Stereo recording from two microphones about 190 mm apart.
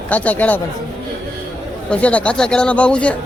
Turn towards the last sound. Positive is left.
turn(degrees=5)  # may be behind; listen again after turning